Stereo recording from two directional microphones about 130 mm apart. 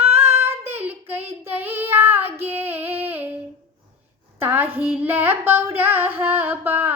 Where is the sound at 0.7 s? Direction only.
15° right (ahead or behind).